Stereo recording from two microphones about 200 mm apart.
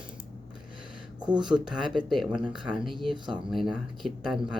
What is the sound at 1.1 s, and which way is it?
Speech, 20° right (ahead or behind).